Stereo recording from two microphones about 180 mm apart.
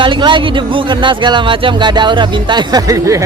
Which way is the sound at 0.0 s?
25° right (ahead or behind).